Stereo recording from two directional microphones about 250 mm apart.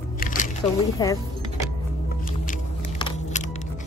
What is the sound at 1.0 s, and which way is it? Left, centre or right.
Speech, centre.